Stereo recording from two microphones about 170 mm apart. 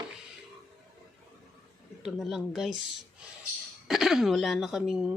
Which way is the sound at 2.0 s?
Centre (ahead or behind).